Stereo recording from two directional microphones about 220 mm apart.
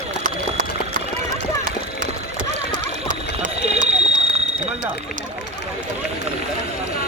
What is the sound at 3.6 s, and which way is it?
Fire alarm, 30° right (ahead or behind).